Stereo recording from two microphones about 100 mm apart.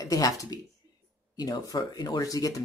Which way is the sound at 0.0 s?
35° left (ahead or behind).